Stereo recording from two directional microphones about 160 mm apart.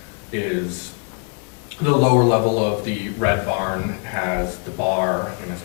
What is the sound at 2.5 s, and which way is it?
A man's voice, 10° left (ahead or behind).